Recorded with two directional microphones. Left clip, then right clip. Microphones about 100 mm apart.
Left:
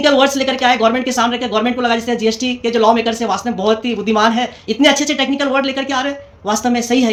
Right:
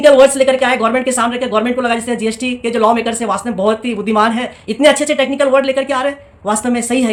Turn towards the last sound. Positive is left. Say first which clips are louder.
# left 1 dB
turn(degrees=-40)  # may be behind; listen again after turning